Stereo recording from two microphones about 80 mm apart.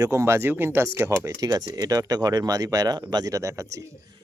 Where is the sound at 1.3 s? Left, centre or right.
Right.